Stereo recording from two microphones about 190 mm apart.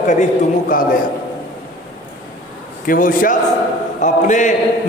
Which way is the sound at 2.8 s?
45° left (ahead or behind).